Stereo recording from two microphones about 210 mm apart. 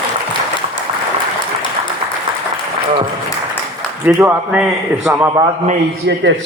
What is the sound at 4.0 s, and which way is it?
A man's voice, 10° right (ahead or behind).